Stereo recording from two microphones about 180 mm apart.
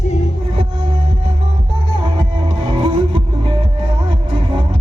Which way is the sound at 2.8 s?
30° right (ahead or behind).